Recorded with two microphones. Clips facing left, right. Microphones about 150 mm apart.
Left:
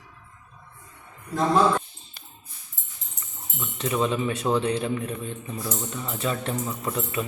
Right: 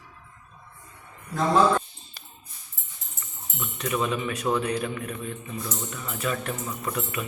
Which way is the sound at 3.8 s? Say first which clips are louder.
Left 2 dB; 30° left (ahead or behind).